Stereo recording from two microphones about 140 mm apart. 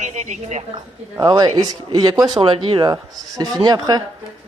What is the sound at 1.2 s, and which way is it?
A woman's voice, 30° right (ahead or behind).